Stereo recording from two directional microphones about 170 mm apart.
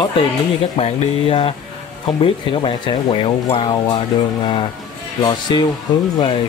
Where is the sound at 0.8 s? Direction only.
35° left (ahead or behind).